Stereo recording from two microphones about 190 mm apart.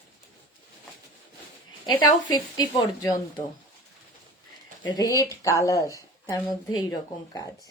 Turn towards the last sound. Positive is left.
turn(degrees=20)  # may be behind; listen again after turning